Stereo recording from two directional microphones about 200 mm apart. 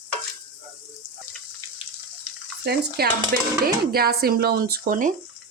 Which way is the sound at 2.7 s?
50° right (ahead or behind).